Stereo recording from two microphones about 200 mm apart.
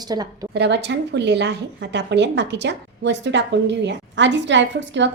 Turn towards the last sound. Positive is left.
turn(degrees=-65)  # may be behind; listen again after turning